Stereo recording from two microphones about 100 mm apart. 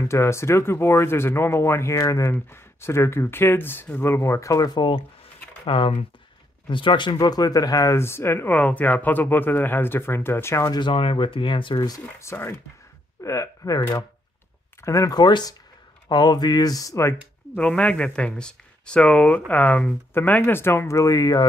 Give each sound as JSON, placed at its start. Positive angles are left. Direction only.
{"t": 0.0, "sound": "speech", "side_deg": 30}
{"t": 10.7, "sound": "speech", "side_deg": 55}
{"t": 11.8, "sound": "speech", "side_deg": 40}
{"t": 12.3, "sound": "speech", "side_deg": 25}
{"t": 17.6, "sound": "speech", "side_deg": 10}